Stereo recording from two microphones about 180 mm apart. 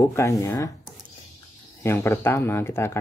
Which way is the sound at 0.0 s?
15° left (ahead or behind).